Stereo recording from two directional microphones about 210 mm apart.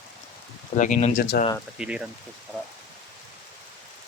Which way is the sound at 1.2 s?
45° left (ahead or behind).